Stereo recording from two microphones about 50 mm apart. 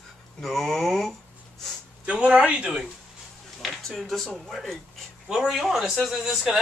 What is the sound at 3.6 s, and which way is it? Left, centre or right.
Speech, centre.